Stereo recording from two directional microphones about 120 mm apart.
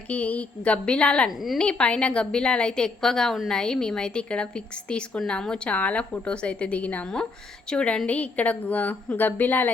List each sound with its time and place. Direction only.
0.1 s a woman's voice: 10° left (ahead or behind)